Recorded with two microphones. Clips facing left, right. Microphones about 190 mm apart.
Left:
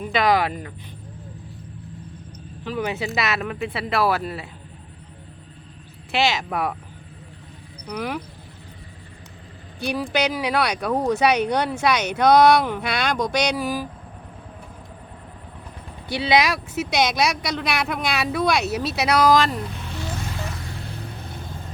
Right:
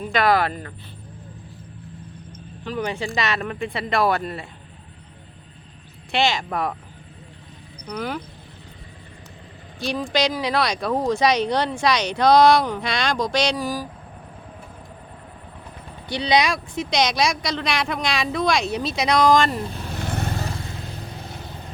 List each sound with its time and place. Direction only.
0.0 s speech: 10° left (ahead or behind)
2.6 s speech: 5° left (ahead or behind)
6.1 s speech: 5° left (ahead or behind)
7.9 s speech: 5° left (ahead or behind)
9.8 s speech: 10° left (ahead or behind)
16.0 s speech: 5° left (ahead or behind)
19.6 s speech: 35° right (ahead or behind)
20.0 s vehicle: 60° right (ahead or behind)
20.4 s vehicle: 30° right (ahead or behind)